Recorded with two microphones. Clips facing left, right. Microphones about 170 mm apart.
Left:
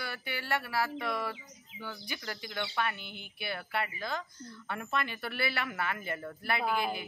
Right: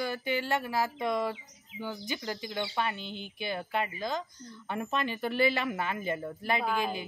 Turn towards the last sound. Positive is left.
turn(degrees=10)  # may be behind; listen again after turning